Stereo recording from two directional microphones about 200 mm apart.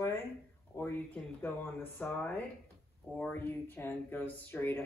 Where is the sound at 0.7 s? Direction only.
15° left (ahead or behind).